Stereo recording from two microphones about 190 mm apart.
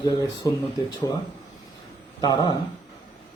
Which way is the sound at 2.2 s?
20° left (ahead or behind).